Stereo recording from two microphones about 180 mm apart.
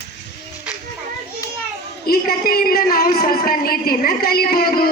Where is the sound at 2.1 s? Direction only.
55° left (ahead or behind).